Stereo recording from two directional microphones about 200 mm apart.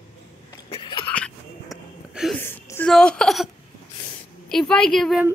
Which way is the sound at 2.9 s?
5° left (ahead or behind).